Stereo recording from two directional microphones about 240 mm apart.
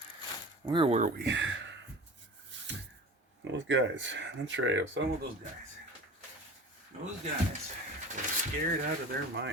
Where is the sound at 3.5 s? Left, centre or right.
Right.